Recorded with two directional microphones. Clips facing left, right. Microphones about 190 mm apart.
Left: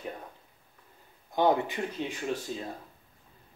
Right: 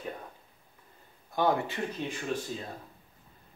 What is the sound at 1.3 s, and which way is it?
Speech, 20° left (ahead or behind).